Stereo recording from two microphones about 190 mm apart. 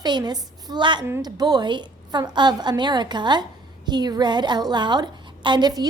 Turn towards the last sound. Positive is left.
turn(degrees=-20)  # may be behind; listen again after turning